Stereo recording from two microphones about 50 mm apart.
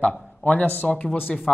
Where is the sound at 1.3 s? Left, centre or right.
Centre.